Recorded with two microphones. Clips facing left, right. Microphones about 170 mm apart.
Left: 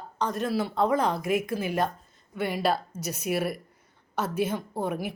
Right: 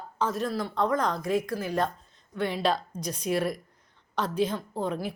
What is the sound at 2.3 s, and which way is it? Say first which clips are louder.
A woman's voice: even; 10° left (ahead or behind).